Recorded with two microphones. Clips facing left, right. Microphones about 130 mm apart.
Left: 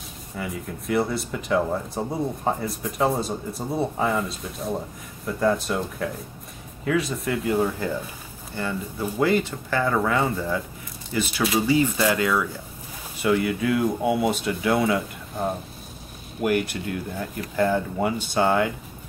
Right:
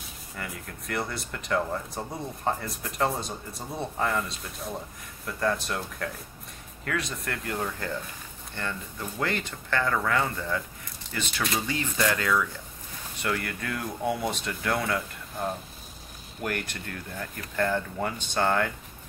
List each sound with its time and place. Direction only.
0.4 s speech: 5° left (ahead or behind)
1.6 s speech: 15° left (ahead or behind)
2.4 s speech: 5° left (ahead or behind)